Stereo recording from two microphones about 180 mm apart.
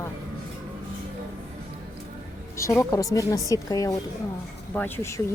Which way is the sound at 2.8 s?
15° left (ahead or behind).